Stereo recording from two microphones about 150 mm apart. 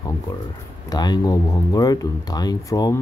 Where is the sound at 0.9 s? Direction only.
25° left (ahead or behind).